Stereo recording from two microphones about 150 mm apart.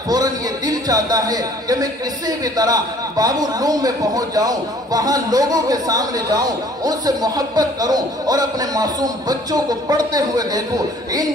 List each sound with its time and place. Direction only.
0.1 s a man's voice: 25° right (ahead or behind)